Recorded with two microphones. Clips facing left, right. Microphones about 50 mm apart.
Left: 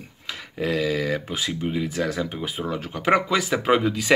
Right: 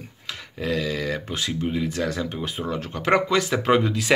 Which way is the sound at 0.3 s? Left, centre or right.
Centre.